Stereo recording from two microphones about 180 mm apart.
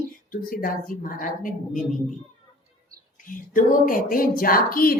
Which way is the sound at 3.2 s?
50° left (ahead or behind).